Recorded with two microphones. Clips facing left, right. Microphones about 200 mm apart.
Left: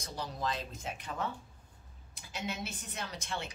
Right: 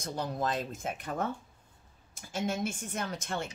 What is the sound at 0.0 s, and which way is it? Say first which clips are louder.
A woman's voice: right 5 dB; 50° right (ahead or behind).